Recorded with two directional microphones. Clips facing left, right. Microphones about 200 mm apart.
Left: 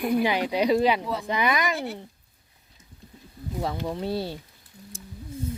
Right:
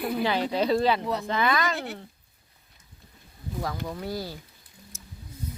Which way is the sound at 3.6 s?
25° left (ahead or behind).